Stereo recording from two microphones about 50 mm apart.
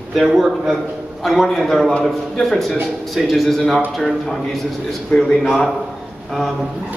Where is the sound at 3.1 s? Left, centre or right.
Centre.